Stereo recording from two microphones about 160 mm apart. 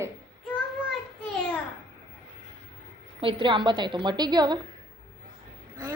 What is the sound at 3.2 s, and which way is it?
A woman's voice, 30° right (ahead or behind).